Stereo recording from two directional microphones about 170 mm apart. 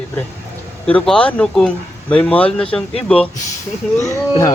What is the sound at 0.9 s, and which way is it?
Speech, 5° left (ahead or behind).